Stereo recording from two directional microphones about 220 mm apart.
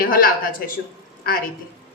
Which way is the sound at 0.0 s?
40° left (ahead or behind).